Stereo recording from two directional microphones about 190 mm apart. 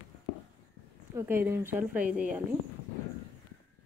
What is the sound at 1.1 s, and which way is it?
A woman's voice, 10° right (ahead or behind).